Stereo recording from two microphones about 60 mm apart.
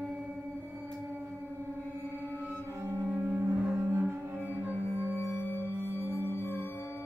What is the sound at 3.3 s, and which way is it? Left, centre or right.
Music, right.